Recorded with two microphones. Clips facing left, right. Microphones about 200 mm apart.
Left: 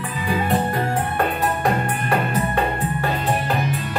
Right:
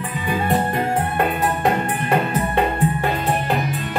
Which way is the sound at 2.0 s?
25° right (ahead or behind).